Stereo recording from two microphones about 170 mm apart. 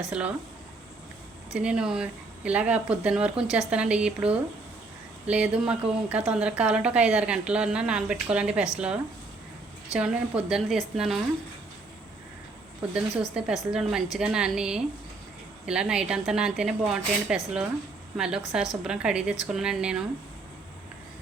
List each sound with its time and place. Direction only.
0.0 s speech: 5° right (ahead or behind)
1.5 s a woman's voice: 5° right (ahead or behind)
13.3 s speech: 5° right (ahead or behind)